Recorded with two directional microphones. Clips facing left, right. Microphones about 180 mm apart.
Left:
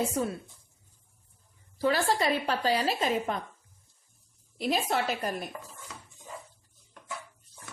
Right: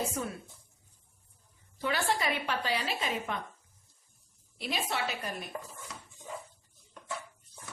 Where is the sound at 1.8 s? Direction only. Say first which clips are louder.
Left 5 dB; 35° left (ahead or behind).